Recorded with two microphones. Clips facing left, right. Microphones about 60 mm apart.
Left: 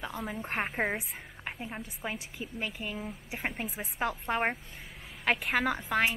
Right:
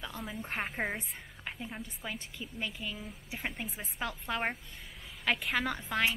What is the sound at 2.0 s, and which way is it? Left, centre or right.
A woman's voice, left.